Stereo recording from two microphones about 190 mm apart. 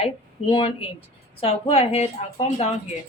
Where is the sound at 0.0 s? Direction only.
30° left (ahead or behind).